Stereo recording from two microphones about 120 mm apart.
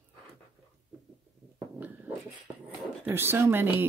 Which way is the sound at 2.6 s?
20° right (ahead or behind).